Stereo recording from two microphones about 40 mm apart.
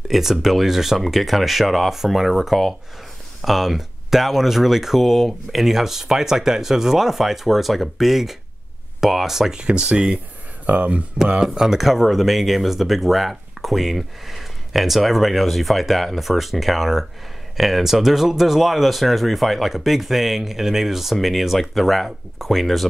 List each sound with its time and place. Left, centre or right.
0.1 s speech: centre
9.6 s speech: right
10.7 s speech: right
11.4 s speech: centre